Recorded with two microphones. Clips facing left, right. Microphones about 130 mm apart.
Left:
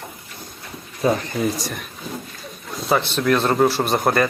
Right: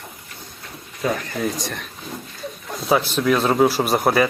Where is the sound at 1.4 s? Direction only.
5° left (ahead or behind).